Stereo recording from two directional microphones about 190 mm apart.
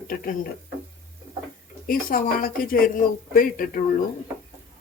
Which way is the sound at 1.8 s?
50° left (ahead or behind).